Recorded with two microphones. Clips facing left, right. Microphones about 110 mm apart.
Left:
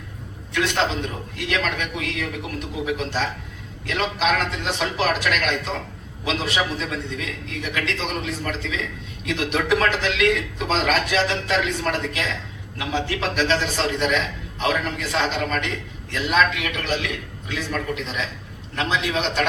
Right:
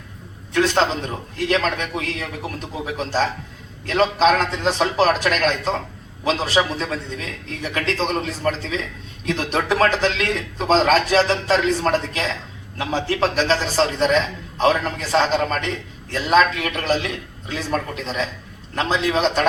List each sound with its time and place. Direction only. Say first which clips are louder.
0.5 s speech: right 4 dB; 35° right (ahead or behind)